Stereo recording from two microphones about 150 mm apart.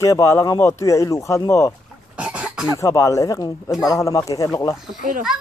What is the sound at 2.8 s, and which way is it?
Speech, 20° left (ahead or behind).